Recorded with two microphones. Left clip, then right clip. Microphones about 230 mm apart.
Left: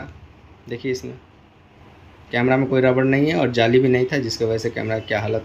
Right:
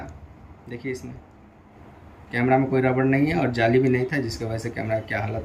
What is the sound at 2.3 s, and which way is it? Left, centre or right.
Speech, left.